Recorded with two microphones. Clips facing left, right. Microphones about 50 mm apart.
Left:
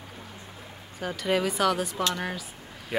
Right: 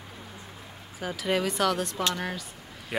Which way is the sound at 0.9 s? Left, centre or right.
Centre.